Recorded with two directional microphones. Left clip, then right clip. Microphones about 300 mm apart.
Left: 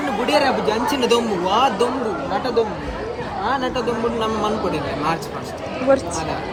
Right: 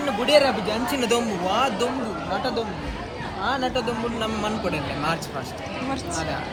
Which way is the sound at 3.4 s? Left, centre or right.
Centre.